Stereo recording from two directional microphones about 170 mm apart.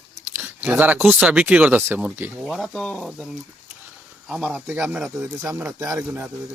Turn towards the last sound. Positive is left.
turn(degrees=-10)  # may be behind; listen again after turning